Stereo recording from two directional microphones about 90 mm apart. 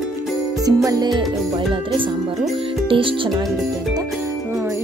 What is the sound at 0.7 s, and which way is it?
Music, 45° right (ahead or behind).